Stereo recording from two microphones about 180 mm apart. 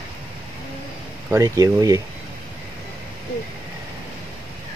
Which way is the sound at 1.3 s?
20° right (ahead or behind).